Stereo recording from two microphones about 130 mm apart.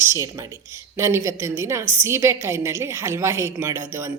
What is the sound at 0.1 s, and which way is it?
A woman's voice, 20° right (ahead or behind).